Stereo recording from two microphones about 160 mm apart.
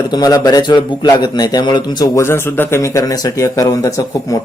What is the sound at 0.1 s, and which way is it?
A man's voice, 25° left (ahead or behind).